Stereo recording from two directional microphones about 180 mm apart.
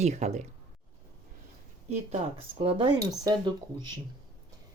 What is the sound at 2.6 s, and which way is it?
Speech, 30° right (ahead or behind).